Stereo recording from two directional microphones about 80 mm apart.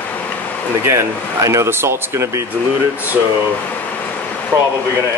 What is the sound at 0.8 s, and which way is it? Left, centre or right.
A man's voice, right.